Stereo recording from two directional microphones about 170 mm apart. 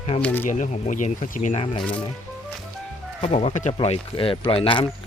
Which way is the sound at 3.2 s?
40° left (ahead or behind).